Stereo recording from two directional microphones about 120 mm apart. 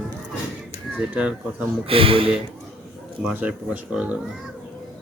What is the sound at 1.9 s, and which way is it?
Speech, 50° right (ahead or behind).